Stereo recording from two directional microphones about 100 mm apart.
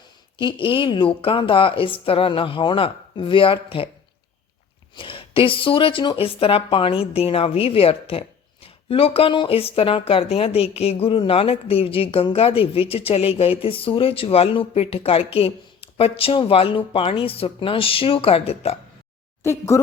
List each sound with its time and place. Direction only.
0.3 s a woman's voice: 55° left (ahead or behind)
4.9 s speech: 60° left (ahead or behind); by 18.8 s 80° left
19.4 s speech: 30° left (ahead or behind)